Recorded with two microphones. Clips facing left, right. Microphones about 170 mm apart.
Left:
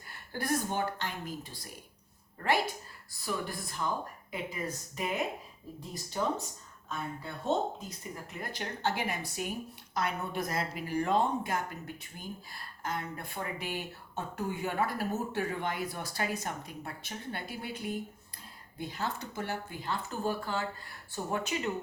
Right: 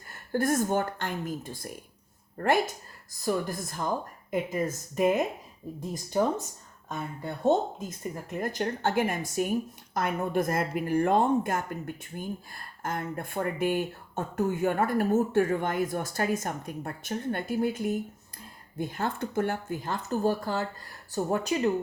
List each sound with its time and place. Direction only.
0.1 s speech: 45° right (ahead or behind)
3.1 s speech: 45° right (ahead or behind)